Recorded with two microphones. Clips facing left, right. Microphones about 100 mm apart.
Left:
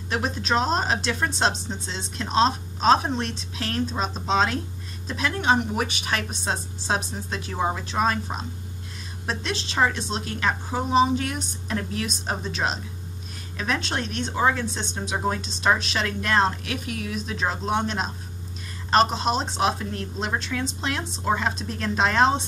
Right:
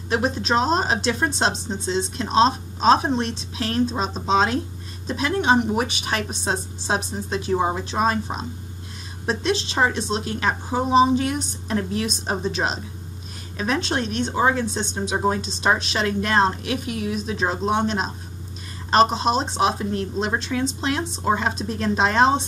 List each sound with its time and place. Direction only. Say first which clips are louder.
0.1 s a woman's voice: right 3 dB; 30° right (ahead or behind)